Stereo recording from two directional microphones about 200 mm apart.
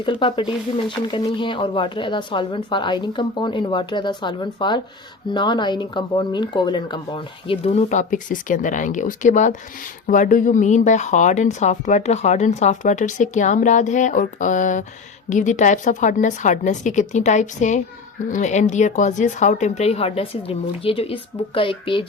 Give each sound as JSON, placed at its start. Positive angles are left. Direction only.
{"t": 0.0, "sound": "speech", "side_deg": 25}